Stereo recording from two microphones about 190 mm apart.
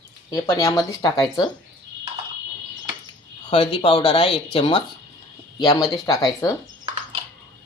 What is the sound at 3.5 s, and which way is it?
Speech, 30° left (ahead or behind).